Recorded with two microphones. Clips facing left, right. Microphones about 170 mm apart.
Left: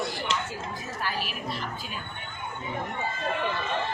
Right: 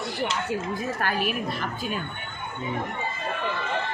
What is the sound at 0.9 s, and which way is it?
Speech, 55° right (ahead or behind).